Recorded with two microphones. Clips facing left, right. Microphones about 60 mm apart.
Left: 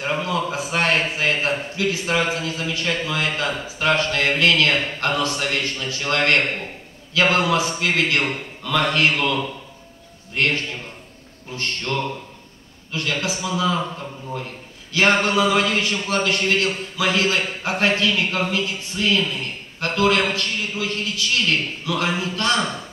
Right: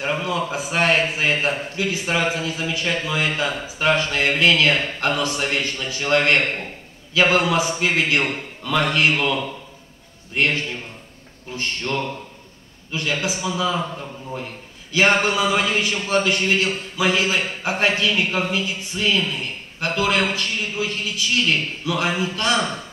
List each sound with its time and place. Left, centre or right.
0.0 s a man's voice: centre
15.1 s a man's voice: centre